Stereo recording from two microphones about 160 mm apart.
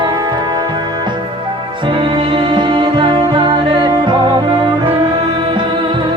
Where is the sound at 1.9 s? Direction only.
30° right (ahead or behind).